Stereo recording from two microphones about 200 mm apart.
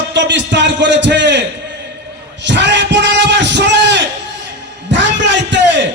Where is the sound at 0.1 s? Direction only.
60° right (ahead or behind).